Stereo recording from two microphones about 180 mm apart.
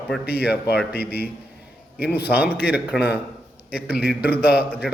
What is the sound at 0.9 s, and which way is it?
Speech, 60° left (ahead or behind).